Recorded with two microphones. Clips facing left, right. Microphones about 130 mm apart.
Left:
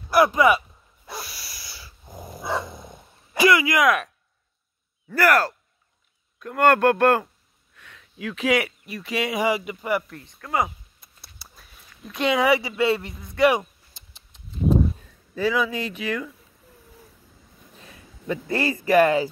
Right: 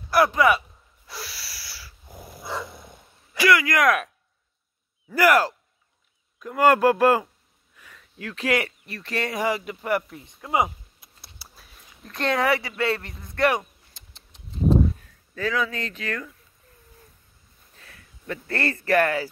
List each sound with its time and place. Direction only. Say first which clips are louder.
0.1 s speech: left 2 dB; 15° left (ahead or behind)
1.2 s dog: right 1 dB; 15° left (ahead or behind)
3.4 s speech: left 1 dB; 15° left (ahead or behind)
5.0 s speech: right 1 dB; 10° right (ahead or behind)
7.7 s a sound: left 1 dB; 5° right (ahead or behind)
8.2 s speech: left 2 dB; 10° left (ahead or behind)
10.0 s a sound: even; 10° right (ahead or behind)
12.0 s speech: left 2 dB; 5° left (ahead or behind)
13.5 s a sound: left 3 dB; 10° left (ahead or behind)
15.3 s speech: left 3 dB; 15° left (ahead or behind)
17.7 s speech: left 4 dB; 15° left (ahead or behind)